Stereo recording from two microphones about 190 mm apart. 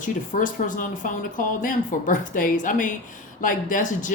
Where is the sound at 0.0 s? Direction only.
45° left (ahead or behind).